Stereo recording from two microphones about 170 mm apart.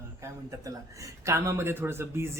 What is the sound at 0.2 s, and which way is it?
Speech, 20° right (ahead or behind).